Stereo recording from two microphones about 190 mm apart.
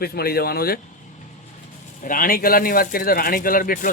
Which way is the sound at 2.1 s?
50° left (ahead or behind).